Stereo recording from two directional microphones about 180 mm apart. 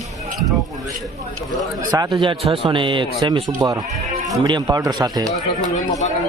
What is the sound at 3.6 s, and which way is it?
Speech, 10° right (ahead or behind).